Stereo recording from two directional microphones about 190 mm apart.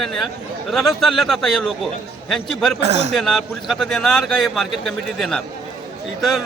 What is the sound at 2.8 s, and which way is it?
Speech, 35° right (ahead or behind).